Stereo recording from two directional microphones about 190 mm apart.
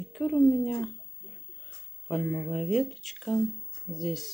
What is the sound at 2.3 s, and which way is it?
A woman's voice, 5° left (ahead or behind).